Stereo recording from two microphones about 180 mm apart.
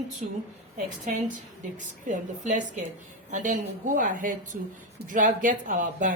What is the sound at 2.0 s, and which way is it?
A woman's voice, 45° right (ahead or behind).